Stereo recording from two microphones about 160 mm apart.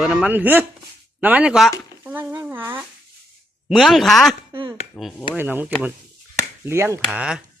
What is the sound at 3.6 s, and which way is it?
Speech, centre (ahead or behind).